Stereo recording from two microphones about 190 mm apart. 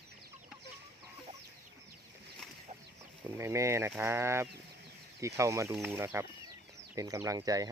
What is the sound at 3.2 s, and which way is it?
Speech, 15° right (ahead or behind).